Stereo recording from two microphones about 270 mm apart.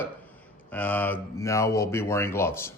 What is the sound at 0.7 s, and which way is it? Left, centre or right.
A man's voice, centre.